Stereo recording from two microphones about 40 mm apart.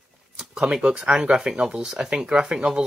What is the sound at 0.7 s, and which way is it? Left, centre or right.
Speech, right.